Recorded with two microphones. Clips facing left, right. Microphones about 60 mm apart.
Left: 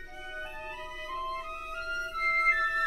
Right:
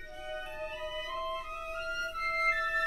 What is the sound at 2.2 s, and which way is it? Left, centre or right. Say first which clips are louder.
Music: left 5 dB; left.